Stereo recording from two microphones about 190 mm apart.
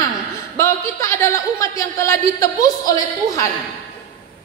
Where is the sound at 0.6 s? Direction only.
15° left (ahead or behind).